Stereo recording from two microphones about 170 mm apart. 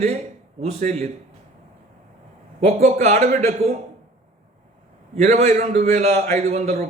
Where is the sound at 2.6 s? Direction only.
40° right (ahead or behind).